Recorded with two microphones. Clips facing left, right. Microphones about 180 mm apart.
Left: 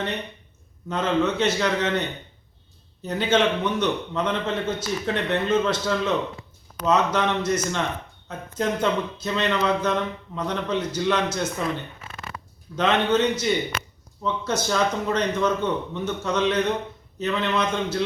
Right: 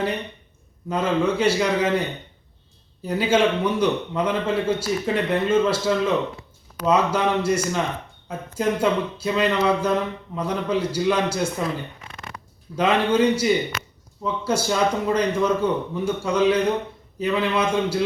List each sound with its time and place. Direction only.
0.9 s speech: 10° right (ahead or behind)
12.0 s a sound: 20° right (ahead or behind)
12.7 s speech: 10° right (ahead or behind)